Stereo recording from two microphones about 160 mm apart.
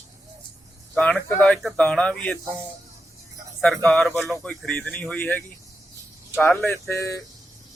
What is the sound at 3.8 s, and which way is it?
Speech, 5° left (ahead or behind).